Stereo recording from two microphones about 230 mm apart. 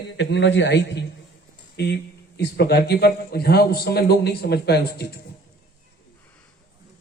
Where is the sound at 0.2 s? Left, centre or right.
Left.